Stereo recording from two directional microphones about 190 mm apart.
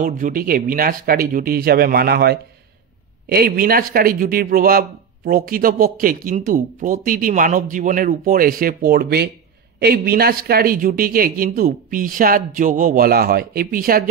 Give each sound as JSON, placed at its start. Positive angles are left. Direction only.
{"t": 0.0, "sound": "speech", "side_deg": -45}